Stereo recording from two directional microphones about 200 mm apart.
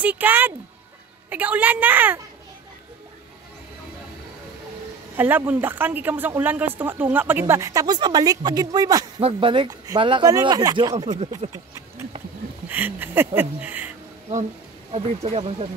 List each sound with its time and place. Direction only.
0.0 s speech: 10° right (ahead or behind)
5.1 s speech: 10° right (ahead or behind)
14.9 s speech: 30° right (ahead or behind)